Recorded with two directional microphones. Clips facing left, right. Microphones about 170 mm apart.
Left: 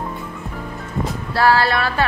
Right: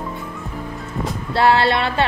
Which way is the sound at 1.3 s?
25° right (ahead or behind).